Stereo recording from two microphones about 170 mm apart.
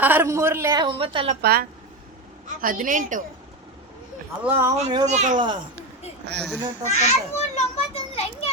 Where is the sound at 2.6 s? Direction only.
55° right (ahead or behind).